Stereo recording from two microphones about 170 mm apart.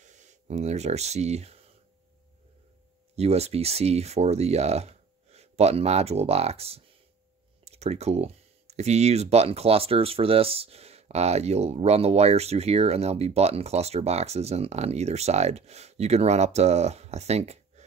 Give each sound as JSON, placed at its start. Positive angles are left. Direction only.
{"t": 0.0, "sound": "speech", "side_deg": -45}
{"t": 3.2, "sound": "speech", "side_deg": -40}